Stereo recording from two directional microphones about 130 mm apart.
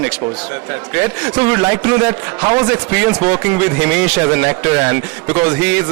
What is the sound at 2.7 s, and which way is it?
A man's voice, 15° right (ahead or behind).